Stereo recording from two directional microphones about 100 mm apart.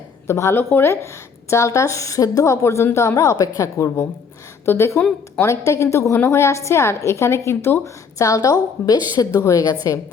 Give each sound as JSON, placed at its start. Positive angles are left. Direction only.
{"t": 0.3, "sound": "a woman's voice", "side_deg": 25}